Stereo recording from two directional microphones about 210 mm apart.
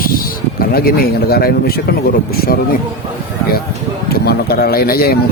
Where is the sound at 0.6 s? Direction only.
45° left (ahead or behind).